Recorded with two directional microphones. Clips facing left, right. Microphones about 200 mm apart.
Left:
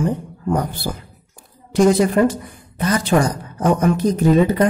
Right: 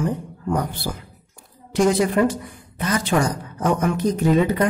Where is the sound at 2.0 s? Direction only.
40° left (ahead or behind).